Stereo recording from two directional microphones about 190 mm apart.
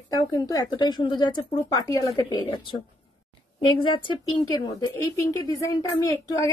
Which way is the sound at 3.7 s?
25° left (ahead or behind).